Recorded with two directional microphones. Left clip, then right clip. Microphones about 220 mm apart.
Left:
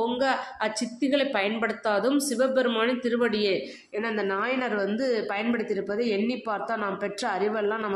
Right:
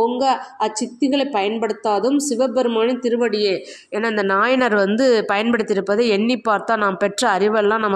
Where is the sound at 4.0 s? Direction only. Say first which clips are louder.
Right 10 dB; 40° right (ahead or behind).